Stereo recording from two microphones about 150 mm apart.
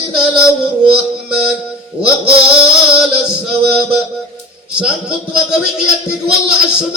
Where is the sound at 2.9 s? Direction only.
5° right (ahead or behind).